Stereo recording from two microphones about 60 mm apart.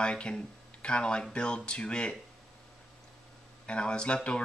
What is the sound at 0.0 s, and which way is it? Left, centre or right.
Speech, centre.